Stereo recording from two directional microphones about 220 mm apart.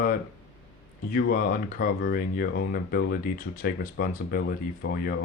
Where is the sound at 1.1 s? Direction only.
40° left (ahead or behind).